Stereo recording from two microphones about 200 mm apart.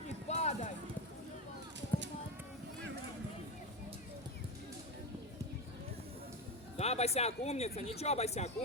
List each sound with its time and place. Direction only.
0.3 s run: 35° left (ahead or behind)
6.7 s speech: 30° left (ahead or behind)